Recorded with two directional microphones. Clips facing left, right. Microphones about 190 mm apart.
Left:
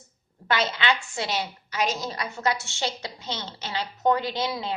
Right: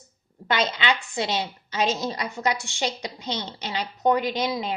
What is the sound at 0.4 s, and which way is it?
A woman's voice, 20° right (ahead or behind).